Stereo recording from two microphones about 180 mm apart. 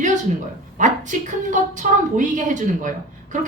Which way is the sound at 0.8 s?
45° right (ahead or behind).